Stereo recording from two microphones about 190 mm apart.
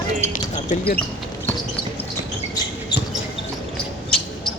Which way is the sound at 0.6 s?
55° left (ahead or behind).